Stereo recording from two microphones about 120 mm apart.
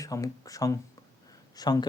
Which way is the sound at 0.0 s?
30° left (ahead or behind).